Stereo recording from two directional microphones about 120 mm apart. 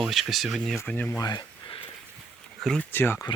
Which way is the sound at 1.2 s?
35° left (ahead or behind).